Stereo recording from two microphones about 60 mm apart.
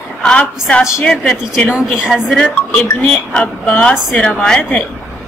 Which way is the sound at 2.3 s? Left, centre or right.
Centre.